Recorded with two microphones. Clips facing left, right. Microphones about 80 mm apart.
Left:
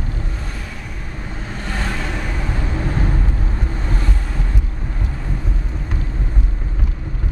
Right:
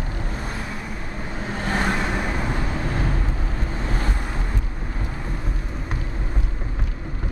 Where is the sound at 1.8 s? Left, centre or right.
Right.